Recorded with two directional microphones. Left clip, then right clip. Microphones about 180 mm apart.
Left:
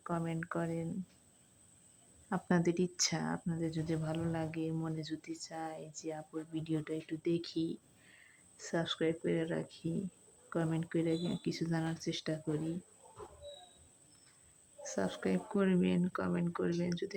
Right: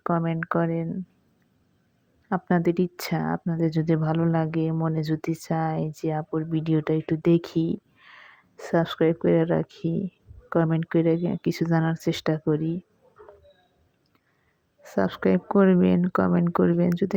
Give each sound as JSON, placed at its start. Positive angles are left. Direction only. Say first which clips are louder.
{"t": 0.0, "sound": "a woman's voice", "louder": "right 13 dB", "side_deg": -30}
{"t": 2.3, "sound": "a woman's voice", "louder": "right 10 dB", "side_deg": -25}
{"t": 3.7, "sound": "a woman's voice", "louder": "right 14 dB", "side_deg": -35}
{"t": 14.8, "sound": "a woman's voice", "louder": "right 13 dB", "side_deg": -30}